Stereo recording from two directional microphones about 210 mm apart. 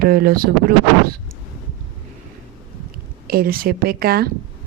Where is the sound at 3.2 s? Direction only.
45° right (ahead or behind).